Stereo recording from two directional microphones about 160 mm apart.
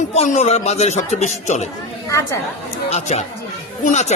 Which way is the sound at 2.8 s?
45° left (ahead or behind).